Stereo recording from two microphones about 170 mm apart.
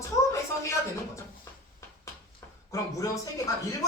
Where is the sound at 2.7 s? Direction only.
20° left (ahead or behind).